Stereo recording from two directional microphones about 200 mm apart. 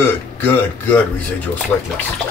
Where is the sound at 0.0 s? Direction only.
10° left (ahead or behind).